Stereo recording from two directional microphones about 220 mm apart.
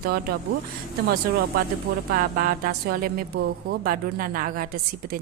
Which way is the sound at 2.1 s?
40° right (ahead or behind).